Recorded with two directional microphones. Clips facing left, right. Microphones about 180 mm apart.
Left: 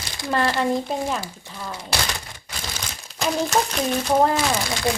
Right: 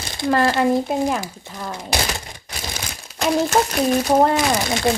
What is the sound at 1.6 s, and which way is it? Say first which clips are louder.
Speech: right 3 dB; 25° right (ahead or behind).